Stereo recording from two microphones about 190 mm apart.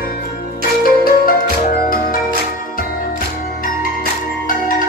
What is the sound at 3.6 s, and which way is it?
Marimba, 50° left (ahead or behind).